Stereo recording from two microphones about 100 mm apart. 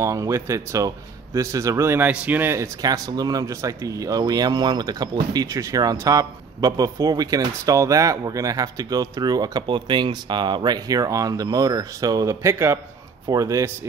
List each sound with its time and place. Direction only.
0.0 s speech: 30° right (ahead or behind)
2.8 s speech: 40° right (ahead or behind)